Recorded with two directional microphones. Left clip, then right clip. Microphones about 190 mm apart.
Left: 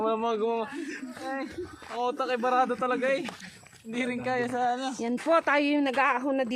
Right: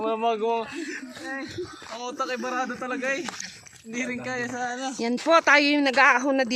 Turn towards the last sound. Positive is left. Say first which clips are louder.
# right 6 dB
turn(degrees=-25)  # may be behind; listen again after turning